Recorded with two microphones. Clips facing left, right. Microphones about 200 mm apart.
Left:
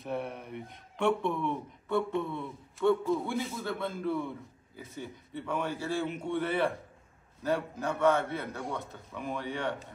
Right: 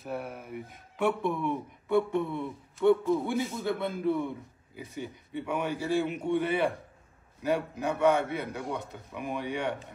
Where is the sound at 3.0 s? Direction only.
Centre (ahead or behind).